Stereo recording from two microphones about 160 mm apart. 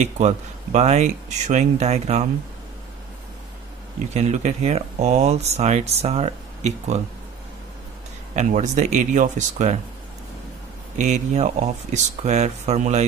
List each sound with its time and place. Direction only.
0.0 s speech: 45° right (ahead or behind)
4.1 s speech: 45° right (ahead or behind)
8.4 s speech: 50° right (ahead or behind)
11.0 s speech: 50° right (ahead or behind)